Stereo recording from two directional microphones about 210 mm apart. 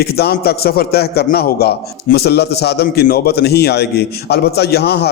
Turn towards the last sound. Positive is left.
turn(degrees=50)  # may be behind; listen again after turning